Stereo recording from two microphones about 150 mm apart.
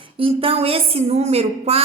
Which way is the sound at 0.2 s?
35° right (ahead or behind).